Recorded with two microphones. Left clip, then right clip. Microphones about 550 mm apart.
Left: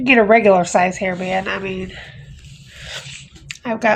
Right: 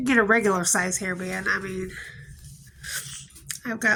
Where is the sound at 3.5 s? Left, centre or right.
Centre.